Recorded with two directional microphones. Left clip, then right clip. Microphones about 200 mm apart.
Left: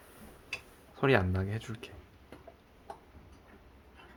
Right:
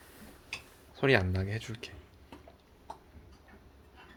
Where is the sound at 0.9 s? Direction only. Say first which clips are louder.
Right 1 dB; 10° left (ahead or behind).